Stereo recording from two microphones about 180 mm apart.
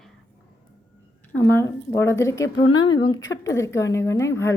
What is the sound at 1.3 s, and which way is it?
A woman's voice, 15° left (ahead or behind).